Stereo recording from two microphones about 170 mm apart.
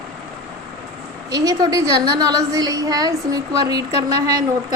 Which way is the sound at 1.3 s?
25° right (ahead or behind).